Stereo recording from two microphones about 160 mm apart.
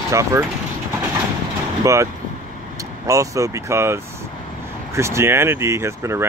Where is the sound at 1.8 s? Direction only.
20° right (ahead or behind).